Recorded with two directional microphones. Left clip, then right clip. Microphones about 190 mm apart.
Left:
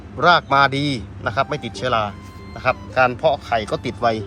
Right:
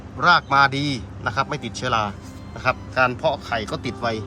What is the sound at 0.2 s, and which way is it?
Speech, 15° right (ahead or behind).